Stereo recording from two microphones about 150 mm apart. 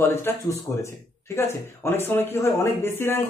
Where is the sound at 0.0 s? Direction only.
15° left (ahead or behind).